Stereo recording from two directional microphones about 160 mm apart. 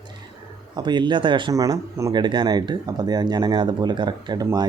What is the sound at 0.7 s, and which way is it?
Speech, 30° right (ahead or behind).